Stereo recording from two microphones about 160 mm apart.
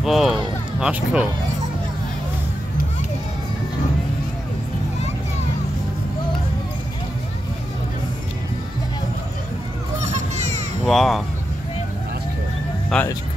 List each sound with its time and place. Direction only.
0.0 s speech: centre (ahead or behind)
10.0 s music: 45° right (ahead or behind)
10.9 s speech: centre (ahead or behind)
12.9 s speech: 5° left (ahead or behind)